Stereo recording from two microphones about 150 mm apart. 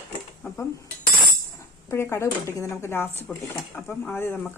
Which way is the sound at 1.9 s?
20° left (ahead or behind).